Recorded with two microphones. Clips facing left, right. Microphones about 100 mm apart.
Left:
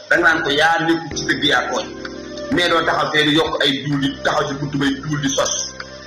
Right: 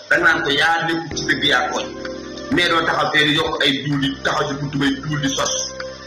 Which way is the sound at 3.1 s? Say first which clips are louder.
Left 3 dB; 25° left (ahead or behind).